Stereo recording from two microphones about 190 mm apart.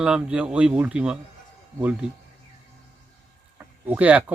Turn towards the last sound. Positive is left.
turn(degrees=-5)  # may be behind; listen again after turning